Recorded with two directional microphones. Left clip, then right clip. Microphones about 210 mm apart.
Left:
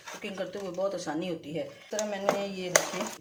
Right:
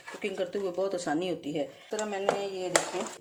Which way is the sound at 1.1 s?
50° right (ahead or behind).